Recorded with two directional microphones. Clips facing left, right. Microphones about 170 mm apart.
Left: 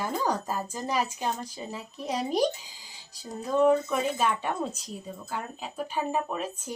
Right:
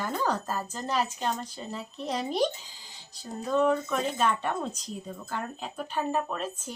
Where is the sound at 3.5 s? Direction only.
10° left (ahead or behind).